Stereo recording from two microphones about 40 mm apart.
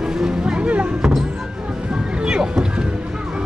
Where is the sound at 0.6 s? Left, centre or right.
Right.